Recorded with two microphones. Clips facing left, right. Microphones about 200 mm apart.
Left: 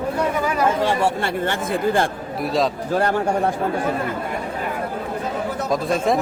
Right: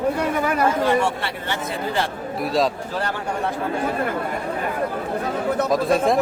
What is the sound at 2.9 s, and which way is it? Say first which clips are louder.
Speech: left 6 dB; 50° left (ahead or behind).